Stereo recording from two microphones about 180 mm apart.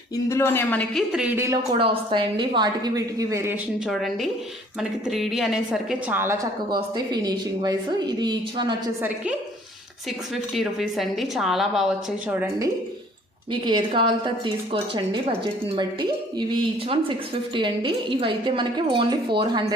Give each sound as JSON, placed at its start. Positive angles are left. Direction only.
{"t": 0.3, "sound": "a woman's voice", "side_deg": 15}
{"t": 1.1, "sound": "speech", "side_deg": -10}
{"t": 1.8, "sound": "a woman's voice", "side_deg": -30}
{"t": 3.8, "sound": "a woman's voice", "side_deg": 0}
{"t": 6.7, "sound": "a woman's voice", "side_deg": -25}
{"t": 9.0, "sound": "speech", "side_deg": -10}
{"t": 10.5, "sound": "a woman's voice", "side_deg": 0}
{"t": 13.5, "sound": "a woman's voice", "side_deg": -25}